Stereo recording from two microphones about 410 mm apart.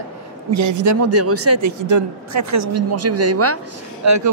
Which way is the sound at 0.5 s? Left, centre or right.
Right.